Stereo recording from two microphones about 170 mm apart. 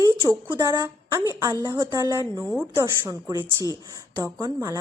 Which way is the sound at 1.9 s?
20° right (ahead or behind).